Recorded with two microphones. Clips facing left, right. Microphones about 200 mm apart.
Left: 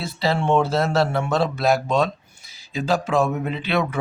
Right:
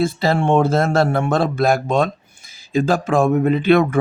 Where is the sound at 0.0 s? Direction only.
50° right (ahead or behind).